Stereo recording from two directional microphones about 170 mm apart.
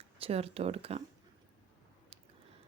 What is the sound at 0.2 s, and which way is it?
Speech, 35° right (ahead or behind).